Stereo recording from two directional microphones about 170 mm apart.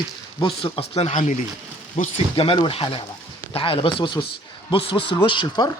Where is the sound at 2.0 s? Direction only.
50° left (ahead or behind).